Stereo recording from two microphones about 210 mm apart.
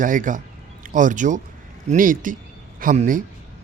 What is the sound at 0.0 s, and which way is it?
Speech, 40° right (ahead or behind).